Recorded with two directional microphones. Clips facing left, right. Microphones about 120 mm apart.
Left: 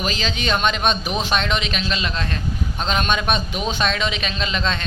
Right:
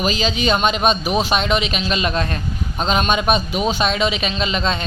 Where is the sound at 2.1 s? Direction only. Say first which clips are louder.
Right 5 dB; 50° right (ahead or behind).